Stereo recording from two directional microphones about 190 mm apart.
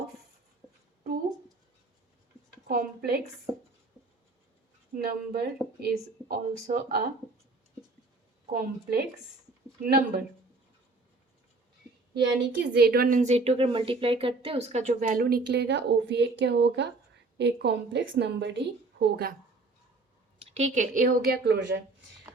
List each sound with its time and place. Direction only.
2.6 s a woman's voice: 55° right (ahead or behind)
4.9 s a woman's voice: 55° right (ahead or behind)
8.5 s a woman's voice: 50° right (ahead or behind)
12.1 s a woman's voice: 65° right (ahead or behind)
20.4 s a woman's voice: 35° right (ahead or behind); by 21.8 s 60° right (ahead or behind)